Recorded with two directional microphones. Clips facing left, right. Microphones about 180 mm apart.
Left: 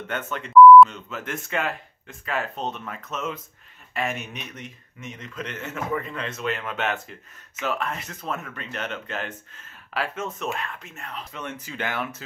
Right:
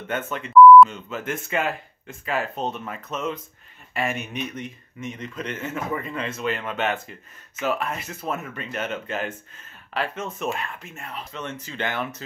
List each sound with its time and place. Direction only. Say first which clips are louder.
0.3 s speech: even; centre (ahead or behind)
11.3 s speech: right 2 dB; 10° left (ahead or behind)